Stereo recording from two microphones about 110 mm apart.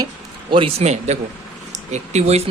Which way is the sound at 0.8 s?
90° right.